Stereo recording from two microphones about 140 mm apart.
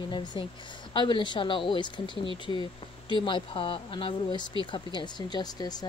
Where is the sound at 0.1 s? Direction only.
35° left (ahead or behind).